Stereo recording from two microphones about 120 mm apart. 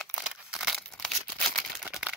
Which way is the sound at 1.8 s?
10° right (ahead or behind).